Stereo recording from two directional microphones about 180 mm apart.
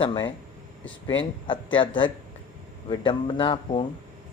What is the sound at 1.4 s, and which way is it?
Speech, 25° left (ahead or behind).